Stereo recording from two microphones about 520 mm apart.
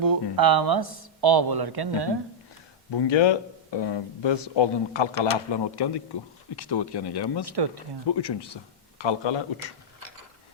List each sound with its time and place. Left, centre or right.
0.0 s speech: right
2.9 s speech: left
7.4 s speech: right
8.1 s speech: left